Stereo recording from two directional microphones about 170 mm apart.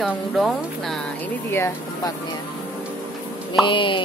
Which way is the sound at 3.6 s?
30° left (ahead or behind).